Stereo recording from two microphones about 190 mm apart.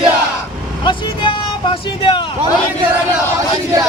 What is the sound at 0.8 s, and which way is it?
Vehicle, 25° left (ahead or behind).